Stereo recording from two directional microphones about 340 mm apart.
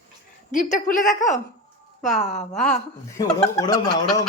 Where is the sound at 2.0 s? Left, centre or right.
Left.